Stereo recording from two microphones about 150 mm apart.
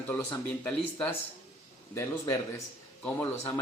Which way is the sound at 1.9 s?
20° left (ahead or behind).